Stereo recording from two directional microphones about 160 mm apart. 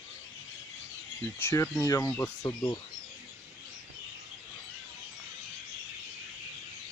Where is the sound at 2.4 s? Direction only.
25° left (ahead or behind).